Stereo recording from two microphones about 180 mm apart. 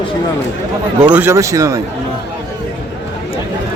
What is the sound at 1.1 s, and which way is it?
Speech, 10° right (ahead or behind).